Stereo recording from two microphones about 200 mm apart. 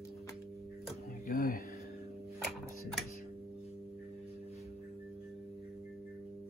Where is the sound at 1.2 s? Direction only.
50° left (ahead or behind).